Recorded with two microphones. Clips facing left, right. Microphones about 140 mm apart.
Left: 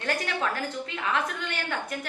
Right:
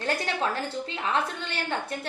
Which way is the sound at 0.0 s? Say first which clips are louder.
Right 1 dB; 30° right (ahead or behind).